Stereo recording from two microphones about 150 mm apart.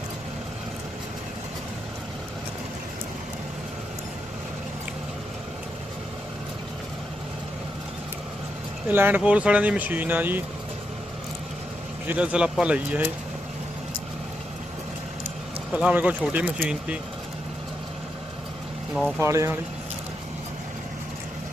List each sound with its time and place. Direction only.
8.9 s speech: 10° right (ahead or behind)
12.0 s speech: 10° right (ahead or behind)
15.7 s speech: 5° right (ahead or behind)
19.2 s speech: 20° right (ahead or behind)